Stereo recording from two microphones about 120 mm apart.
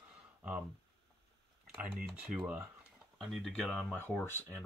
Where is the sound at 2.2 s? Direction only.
10° right (ahead or behind).